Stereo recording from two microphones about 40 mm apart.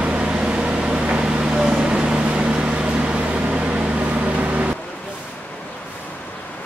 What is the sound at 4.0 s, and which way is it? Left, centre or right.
Microwave oven, right.